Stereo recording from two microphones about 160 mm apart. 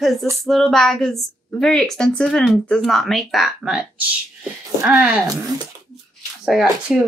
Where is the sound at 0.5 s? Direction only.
Centre (ahead or behind).